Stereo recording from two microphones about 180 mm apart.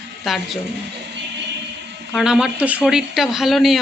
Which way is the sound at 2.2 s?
5° right (ahead or behind).